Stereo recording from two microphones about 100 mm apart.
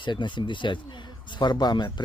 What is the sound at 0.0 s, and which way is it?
Speech, 50° left (ahead or behind).